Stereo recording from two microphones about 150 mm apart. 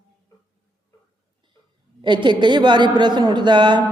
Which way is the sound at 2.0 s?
30° right (ahead or behind).